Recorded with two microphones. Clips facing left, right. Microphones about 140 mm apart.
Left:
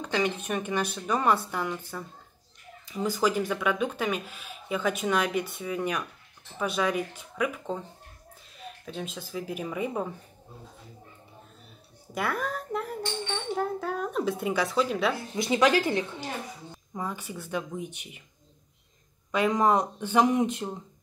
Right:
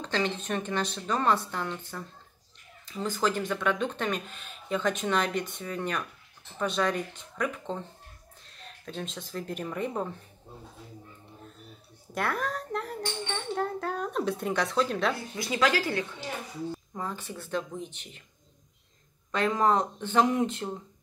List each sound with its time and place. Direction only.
0.0 s speech: 10° left (ahead or behind)
12.1 s speech: centre (ahead or behind)
15.3 s speech: 20° left (ahead or behind)
16.9 s speech: 10° left (ahead or behind)
19.3 s speech: 10° left (ahead or behind)